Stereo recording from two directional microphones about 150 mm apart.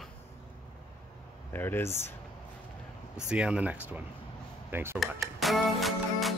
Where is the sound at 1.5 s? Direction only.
15° left (ahead or behind).